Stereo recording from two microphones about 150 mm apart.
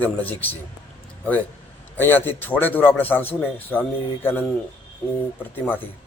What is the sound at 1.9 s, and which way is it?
Speech, 15° left (ahead or behind).